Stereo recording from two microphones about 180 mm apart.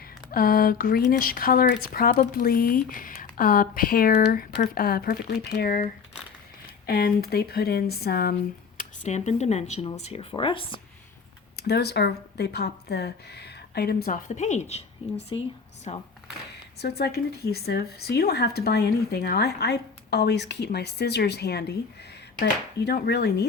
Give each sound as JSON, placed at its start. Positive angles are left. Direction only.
{"t": 0.3, "sound": "speech", "side_deg": 55}
{"t": 8.8, "sound": "speech", "side_deg": 40}
{"t": 11.5, "sound": "speech", "side_deg": 65}
{"t": 15.9, "sound": "speech", "side_deg": 40}
{"t": 16.5, "sound": "speech", "side_deg": 65}